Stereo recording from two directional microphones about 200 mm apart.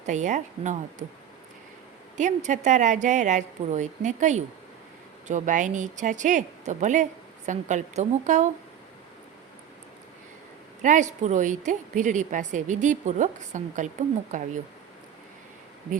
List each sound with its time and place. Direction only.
0.0 s speech: 35° right (ahead or behind)
2.1 s speech: 35° right (ahead or behind)
10.8 s speech: 40° right (ahead or behind)